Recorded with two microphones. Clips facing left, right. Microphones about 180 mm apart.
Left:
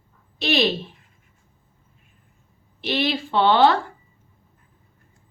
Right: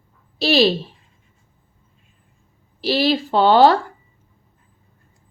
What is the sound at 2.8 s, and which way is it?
Speech, 35° right (ahead or behind).